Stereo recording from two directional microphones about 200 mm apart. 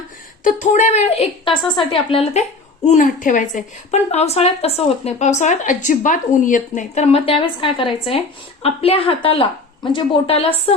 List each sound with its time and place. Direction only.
0.4 s a woman's voice: 35° left (ahead or behind)
2.8 s a woman's voice: 40° left (ahead or behind)